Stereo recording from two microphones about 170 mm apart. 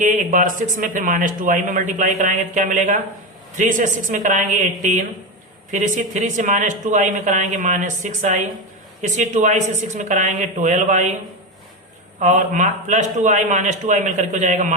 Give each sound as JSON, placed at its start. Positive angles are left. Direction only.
{"t": 0.0, "sound": "a man's voice", "side_deg": -50}
{"t": 12.2, "sound": "a man's voice", "side_deg": -45}